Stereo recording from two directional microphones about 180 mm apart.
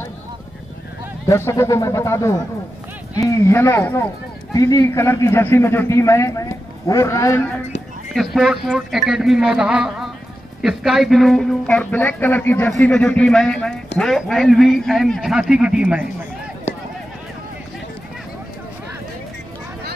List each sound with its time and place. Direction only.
1.2 s speech: 15° left (ahead or behind)
8.1 s a man's voice: centre (ahead or behind)